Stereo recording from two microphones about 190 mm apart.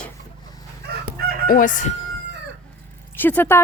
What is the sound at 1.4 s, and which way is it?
Crowing, 45° left (ahead or behind).